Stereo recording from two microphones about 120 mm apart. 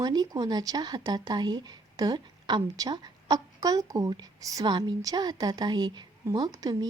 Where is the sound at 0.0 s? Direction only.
35° right (ahead or behind).